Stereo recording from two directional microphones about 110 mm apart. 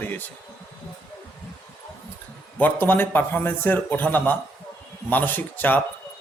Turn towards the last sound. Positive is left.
turn(degrees=15)  # may be behind; listen again after turning